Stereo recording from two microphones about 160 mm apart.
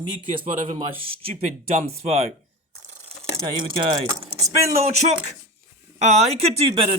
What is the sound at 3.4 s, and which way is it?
Speech, 30° right (ahead or behind).